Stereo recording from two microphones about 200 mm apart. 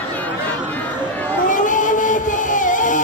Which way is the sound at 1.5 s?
40° left (ahead or behind).